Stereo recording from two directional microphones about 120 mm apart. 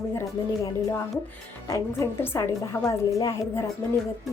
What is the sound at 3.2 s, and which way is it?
Speech, 30° left (ahead or behind).